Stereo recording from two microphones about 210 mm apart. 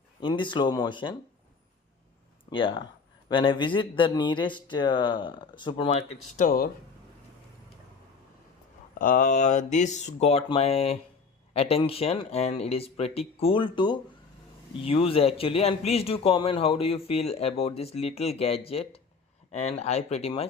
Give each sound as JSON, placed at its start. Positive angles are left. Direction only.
{"t": 0.2, "sound": "speech", "side_deg": 25}
{"t": 2.5, "sound": "speech", "side_deg": 25}
{"t": 6.3, "sound": "speech", "side_deg": 40}
{"t": 9.0, "sound": "speech", "side_deg": 40}